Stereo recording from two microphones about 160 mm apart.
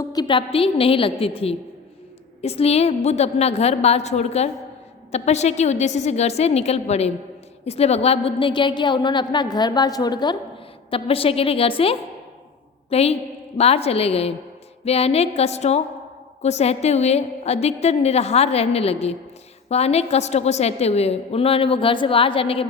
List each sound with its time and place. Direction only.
0.0 s a woman's voice: 25° left (ahead or behind)
10.9 s a woman's voice: 35° left (ahead or behind)